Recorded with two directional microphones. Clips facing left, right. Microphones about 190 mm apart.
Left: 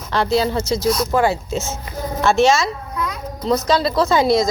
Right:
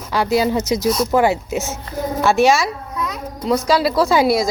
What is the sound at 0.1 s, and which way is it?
A woman's voice, 10° right (ahead or behind).